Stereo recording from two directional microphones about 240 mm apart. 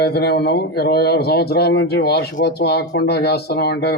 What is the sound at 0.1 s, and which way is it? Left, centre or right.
A man's voice, left.